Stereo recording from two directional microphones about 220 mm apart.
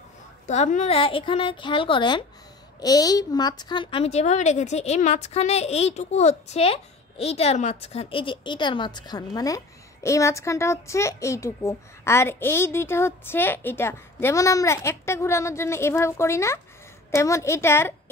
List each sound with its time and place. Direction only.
0.5 s a woman's voice: 30° left (ahead or behind); by 18.1 s 10° left (ahead or behind)